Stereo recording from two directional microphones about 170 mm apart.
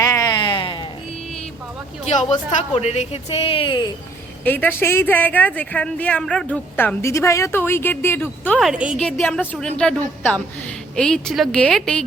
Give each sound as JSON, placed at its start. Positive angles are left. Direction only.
{"t": 0.0, "sound": "a sound", "side_deg": 20}
{"t": 2.5, "sound": "a woman's voice", "side_deg": 40}
{"t": 4.4, "sound": "speech", "side_deg": 10}
{"t": 8.5, "sound": "a woman's voice", "side_deg": -5}
{"t": 9.1, "sound": "a woman's voice", "side_deg": 10}